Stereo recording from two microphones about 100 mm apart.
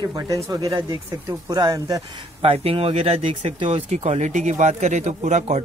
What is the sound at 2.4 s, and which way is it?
Speech, 80° right.